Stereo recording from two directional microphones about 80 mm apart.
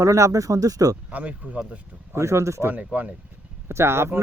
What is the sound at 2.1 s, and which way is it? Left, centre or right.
Speech, right.